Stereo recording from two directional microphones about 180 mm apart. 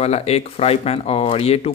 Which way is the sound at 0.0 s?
35° left (ahead or behind).